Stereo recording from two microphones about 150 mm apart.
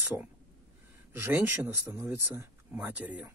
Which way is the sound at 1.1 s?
15° right (ahead or behind).